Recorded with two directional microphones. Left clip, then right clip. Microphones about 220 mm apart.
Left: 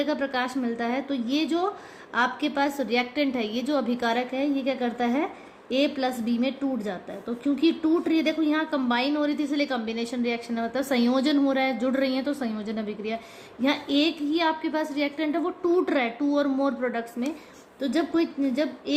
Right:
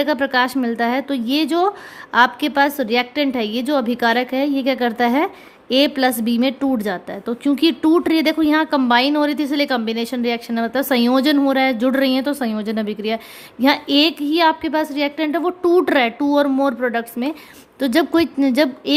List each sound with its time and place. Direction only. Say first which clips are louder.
0.0 s a woman's voice: right 9 dB; 40° right (ahead or behind)